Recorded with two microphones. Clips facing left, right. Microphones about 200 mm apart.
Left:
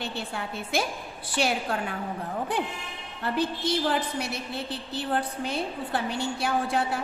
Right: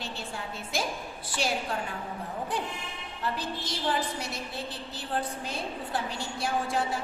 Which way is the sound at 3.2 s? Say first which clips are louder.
Left 7 dB; 60° left (ahead or behind).